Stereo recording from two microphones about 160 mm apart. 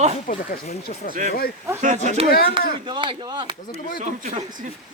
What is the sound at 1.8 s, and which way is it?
Speech, 50° right (ahead or behind).